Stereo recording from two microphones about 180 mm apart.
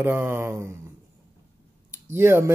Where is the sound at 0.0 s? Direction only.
10° right (ahead or behind).